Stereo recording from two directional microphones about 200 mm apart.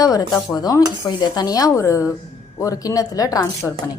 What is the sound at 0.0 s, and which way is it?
Cutlery, 20° left (ahead or behind).